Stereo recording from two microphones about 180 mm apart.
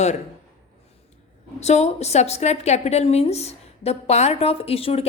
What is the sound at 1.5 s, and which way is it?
A woman's voice, 40° left (ahead or behind).